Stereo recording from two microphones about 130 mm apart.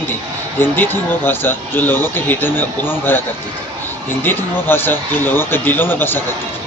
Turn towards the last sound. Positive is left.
turn(degrees=15)  # may be behind; listen again after turning